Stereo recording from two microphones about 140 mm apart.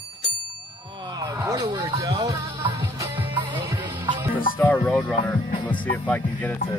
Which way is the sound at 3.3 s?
35° right (ahead or behind).